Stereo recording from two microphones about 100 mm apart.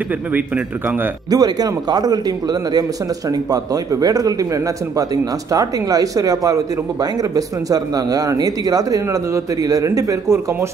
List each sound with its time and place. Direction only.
1.3 s speech: 40° right (ahead or behind)